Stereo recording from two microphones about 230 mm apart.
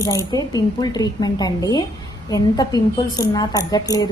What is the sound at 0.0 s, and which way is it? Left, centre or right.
A woman's voice, centre.